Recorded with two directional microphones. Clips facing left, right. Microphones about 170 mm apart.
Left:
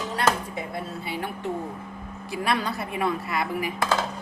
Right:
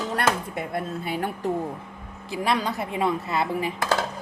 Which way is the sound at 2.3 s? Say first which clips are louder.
Right 1 dB; 20° right (ahead or behind).